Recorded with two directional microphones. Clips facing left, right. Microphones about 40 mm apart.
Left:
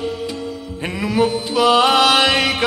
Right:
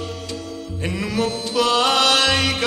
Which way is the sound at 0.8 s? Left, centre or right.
Centre.